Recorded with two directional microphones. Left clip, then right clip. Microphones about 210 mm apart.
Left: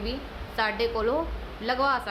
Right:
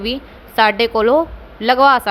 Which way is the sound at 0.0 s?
35° right (ahead or behind).